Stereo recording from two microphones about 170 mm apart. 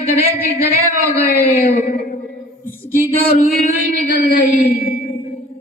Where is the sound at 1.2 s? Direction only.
55° left (ahead or behind).